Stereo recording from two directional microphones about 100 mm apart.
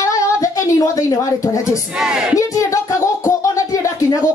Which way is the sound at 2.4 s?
35° left (ahead or behind).